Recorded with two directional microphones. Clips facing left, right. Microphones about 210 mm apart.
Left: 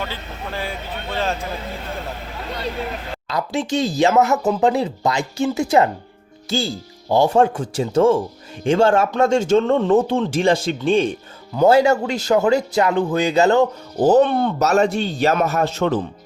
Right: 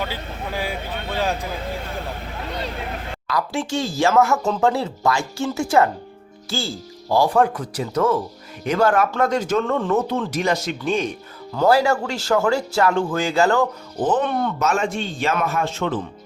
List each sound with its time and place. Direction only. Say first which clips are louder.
0.0 s speech: right 1 dB; 10° right (ahead or behind)
3.2 s speech: left 2 dB; 20° left (ahead or behind)
14.0 s a man's voice: left 6 dB; 40° left (ahead or behind)